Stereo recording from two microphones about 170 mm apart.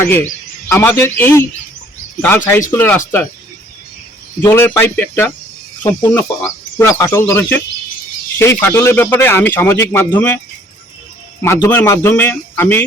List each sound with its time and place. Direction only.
0.0 s speech: 15° left (ahead or behind)
2.5 s speech: 15° left (ahead or behind)
4.4 s speech: 15° left (ahead or behind)
11.4 s speech: 10° left (ahead or behind)